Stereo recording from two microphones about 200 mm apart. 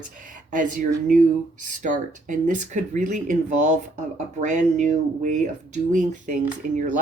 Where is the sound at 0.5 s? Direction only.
40° right (ahead or behind).